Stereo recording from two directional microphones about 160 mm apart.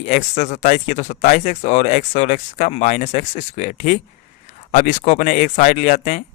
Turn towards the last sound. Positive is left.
turn(degrees=45)  # may be behind; listen again after turning